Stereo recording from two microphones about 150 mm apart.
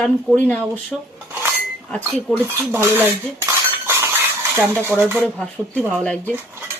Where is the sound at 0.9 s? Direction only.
Centre (ahead or behind).